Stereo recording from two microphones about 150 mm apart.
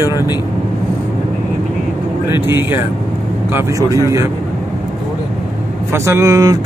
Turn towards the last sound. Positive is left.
turn(degrees=-20)  # may be behind; listen again after turning